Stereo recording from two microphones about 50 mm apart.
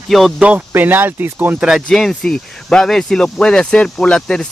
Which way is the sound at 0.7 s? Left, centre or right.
Right.